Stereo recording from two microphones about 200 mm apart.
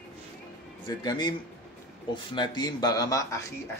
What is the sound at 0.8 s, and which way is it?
Speech, 20° left (ahead or behind).